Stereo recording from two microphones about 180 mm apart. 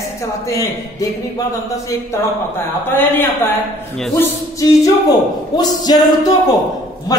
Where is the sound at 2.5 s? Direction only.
10° left (ahead or behind).